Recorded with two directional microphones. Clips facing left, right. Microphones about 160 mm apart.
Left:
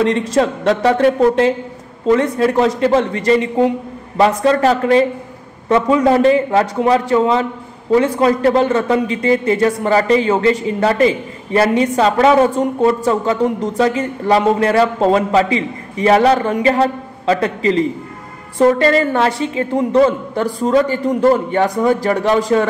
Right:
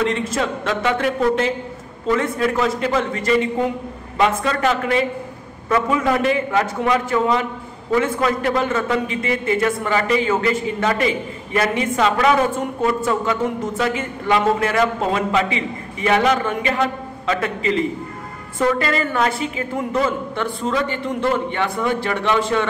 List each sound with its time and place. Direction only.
0.0 s a man's voice: 35° left (ahead or behind)